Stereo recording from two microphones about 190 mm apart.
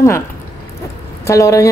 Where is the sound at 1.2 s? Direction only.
15° left (ahead or behind).